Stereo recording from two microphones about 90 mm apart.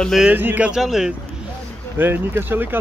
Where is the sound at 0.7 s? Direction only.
5° right (ahead or behind).